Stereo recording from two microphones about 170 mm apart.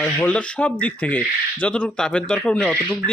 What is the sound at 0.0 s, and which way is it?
Speech, 10° left (ahead or behind).